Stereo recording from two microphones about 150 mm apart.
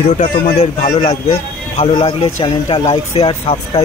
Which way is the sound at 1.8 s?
40° left (ahead or behind).